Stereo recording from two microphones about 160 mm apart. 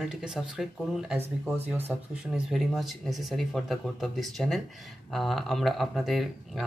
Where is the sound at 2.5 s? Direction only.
Centre (ahead or behind).